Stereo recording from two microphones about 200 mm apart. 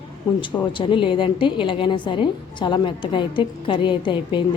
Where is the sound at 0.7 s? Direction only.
25° left (ahead or behind).